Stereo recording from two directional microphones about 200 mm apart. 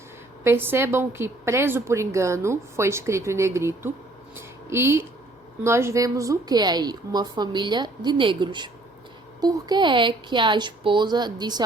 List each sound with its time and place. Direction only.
0.4 s a woman's voice: 10° right (ahead or behind)